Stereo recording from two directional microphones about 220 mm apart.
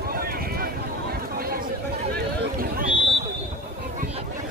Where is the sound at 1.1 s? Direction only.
40° right (ahead or behind).